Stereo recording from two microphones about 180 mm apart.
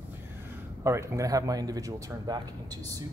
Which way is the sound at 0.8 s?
15° right (ahead or behind).